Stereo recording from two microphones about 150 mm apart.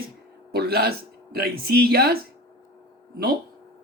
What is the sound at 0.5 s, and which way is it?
Speech, 90° right.